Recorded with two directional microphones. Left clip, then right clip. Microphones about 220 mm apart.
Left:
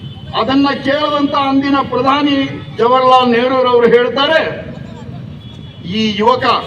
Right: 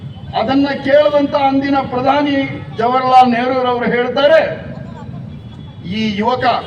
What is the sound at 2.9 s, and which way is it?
A man's voice, 30° right (ahead or behind).